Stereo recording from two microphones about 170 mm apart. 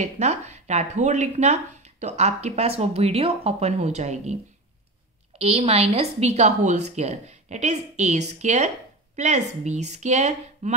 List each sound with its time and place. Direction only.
0.0 s speech: 45° right (ahead or behind)
5.4 s a woman's voice: 35° right (ahead or behind)